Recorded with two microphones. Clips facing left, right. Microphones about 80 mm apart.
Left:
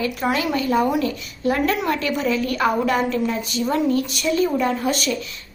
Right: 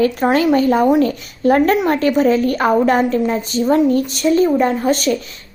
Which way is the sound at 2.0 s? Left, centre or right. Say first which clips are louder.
Right 8 dB; right.